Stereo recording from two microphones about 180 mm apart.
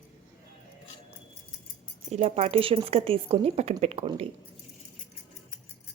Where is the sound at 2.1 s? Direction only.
35° right (ahead or behind).